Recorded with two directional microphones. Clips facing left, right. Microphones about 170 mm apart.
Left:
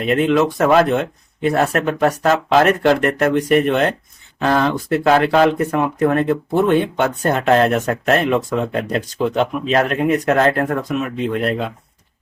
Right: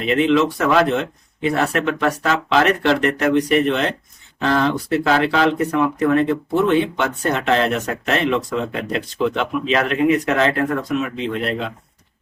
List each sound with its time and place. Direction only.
0.0 s speech: 50° left (ahead or behind)